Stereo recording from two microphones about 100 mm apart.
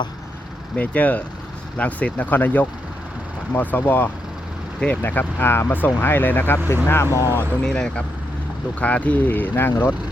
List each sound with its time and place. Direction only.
0.8 s speech: 15° left (ahead or behind)
7.6 s speech: 5° left (ahead or behind)